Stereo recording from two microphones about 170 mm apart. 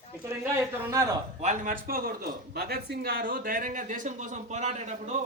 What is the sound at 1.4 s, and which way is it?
A man's voice, 50° right (ahead or behind).